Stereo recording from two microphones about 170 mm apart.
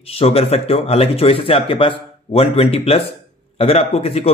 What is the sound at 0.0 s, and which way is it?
A man's voice, 35° left (ahead or behind).